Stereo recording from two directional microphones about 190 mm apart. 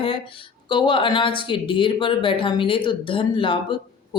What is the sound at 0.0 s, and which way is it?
A woman's voice, 25° left (ahead or behind).